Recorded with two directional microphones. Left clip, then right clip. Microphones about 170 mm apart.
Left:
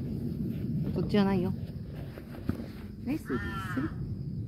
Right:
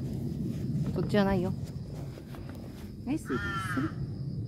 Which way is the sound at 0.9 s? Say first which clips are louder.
Right 1 dB; 10° left (ahead or behind).